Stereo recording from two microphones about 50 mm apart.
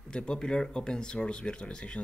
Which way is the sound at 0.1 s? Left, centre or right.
Centre.